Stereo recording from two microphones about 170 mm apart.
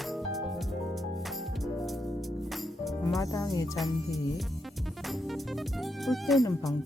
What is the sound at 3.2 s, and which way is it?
Speech, 20° left (ahead or behind).